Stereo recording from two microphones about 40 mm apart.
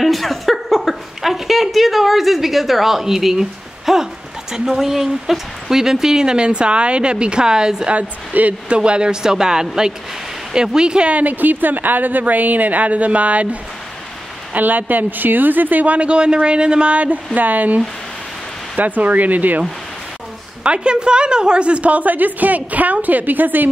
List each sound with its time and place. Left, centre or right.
0.0 s a woman's voice: centre
7.9 s a woman's voice: right
8.7 s a woman's voice: right
11.1 s a woman's voice: right
20.6 s a woman's voice: right